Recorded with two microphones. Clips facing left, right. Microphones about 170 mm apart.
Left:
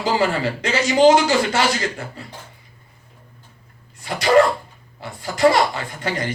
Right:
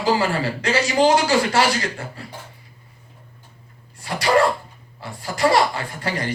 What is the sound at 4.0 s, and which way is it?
Sneeze, 20° left (ahead or behind).